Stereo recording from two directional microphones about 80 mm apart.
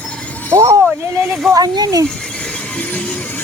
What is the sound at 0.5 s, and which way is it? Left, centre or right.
Speech, right.